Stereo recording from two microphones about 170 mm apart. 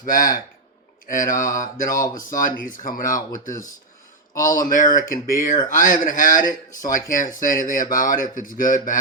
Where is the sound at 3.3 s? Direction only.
20° left (ahead or behind).